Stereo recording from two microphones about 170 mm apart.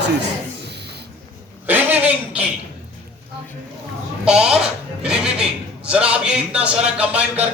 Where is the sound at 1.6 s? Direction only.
10° right (ahead or behind).